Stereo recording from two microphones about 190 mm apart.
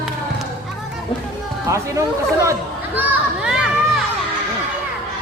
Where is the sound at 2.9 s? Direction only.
5° right (ahead or behind).